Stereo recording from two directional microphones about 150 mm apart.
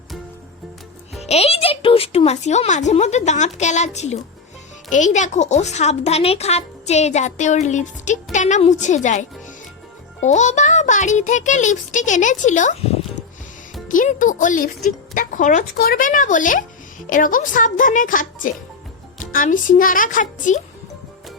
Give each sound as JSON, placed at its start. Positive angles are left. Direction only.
{"t": 1.2, "sound": "speech", "side_deg": 45}
{"t": 10.2, "sound": "speech", "side_deg": 50}
{"t": 13.8, "sound": "speech", "side_deg": 60}